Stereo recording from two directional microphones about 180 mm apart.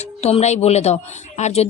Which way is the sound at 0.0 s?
35° left (ahead or behind).